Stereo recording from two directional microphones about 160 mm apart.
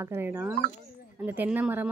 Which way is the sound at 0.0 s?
15° right (ahead or behind).